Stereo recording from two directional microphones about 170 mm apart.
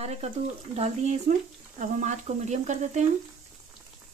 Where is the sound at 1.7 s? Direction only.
45° right (ahead or behind).